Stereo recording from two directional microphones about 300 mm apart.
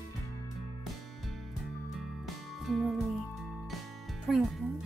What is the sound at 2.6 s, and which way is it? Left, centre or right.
Music, centre.